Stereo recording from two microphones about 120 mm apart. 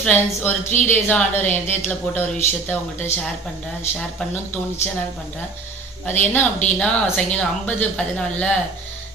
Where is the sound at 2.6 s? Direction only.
15° left (ahead or behind).